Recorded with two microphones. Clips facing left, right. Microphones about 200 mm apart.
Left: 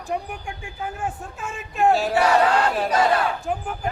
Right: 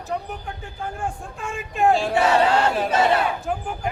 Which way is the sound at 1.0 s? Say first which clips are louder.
Even; centre (ahead or behind).